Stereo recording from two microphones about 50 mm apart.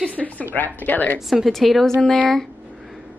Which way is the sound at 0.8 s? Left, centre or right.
Left.